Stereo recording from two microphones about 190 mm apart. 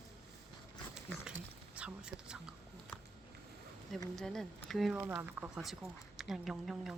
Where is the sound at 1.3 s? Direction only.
5° right (ahead or behind).